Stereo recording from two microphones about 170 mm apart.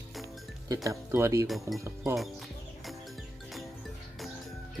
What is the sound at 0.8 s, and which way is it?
Speech, 15° right (ahead or behind).